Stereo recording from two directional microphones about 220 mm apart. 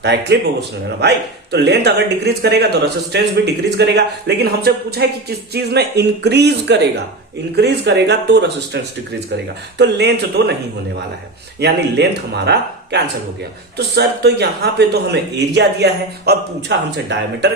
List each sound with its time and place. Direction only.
0.0 s a man's voice: 50° right (ahead or behind)
11.6 s a man's voice: 50° right (ahead or behind)